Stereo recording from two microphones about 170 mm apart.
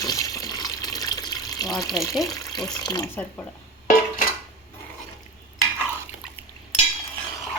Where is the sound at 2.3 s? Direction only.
25° left (ahead or behind).